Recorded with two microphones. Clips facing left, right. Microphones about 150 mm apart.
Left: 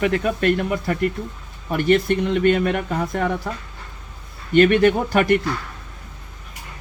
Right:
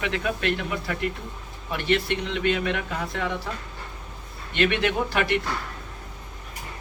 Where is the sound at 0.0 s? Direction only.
45° left (ahead or behind).